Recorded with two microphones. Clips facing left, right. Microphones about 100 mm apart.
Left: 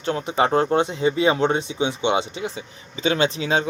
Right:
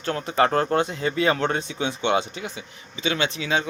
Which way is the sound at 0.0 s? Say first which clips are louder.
Left 1 dB; 20° left (ahead or behind).